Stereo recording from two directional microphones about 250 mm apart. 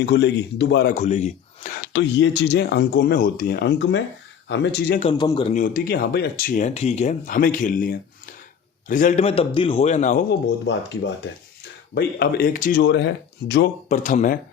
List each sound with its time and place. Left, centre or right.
0.0 s speech: left
0.9 s speech: left
4.9 s speech: centre
10.7 s speech: left
13.8 s speech: left